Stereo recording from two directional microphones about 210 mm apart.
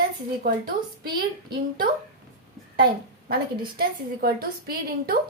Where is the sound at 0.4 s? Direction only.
45° right (ahead or behind).